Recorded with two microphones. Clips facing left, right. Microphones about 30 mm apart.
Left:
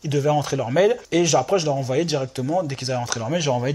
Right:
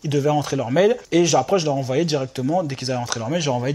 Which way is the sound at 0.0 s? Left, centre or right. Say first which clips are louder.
Right 1 dB; centre.